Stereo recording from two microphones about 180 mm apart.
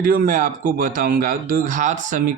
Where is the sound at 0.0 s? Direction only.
50° right (ahead or behind).